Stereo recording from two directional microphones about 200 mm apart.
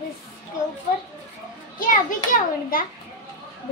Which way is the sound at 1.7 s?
40° left (ahead or behind).